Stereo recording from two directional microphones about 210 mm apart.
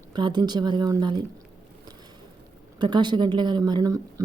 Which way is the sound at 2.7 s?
20° right (ahead or behind).